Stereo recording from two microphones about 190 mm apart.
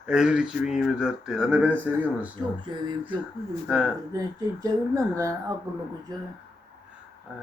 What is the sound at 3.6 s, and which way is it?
Speech, 5° right (ahead or behind).